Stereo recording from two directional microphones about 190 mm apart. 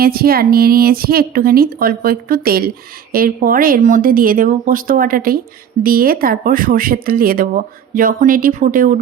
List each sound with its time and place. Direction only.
0.0 s a woman's voice: 50° right (ahead or behind)